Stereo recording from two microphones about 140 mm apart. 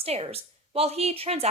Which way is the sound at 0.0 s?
45° right (ahead or behind).